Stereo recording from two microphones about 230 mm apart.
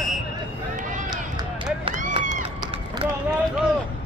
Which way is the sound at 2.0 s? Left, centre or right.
Right.